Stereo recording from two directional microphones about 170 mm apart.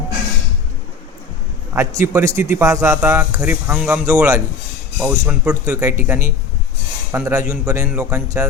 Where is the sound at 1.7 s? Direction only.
15° right (ahead or behind).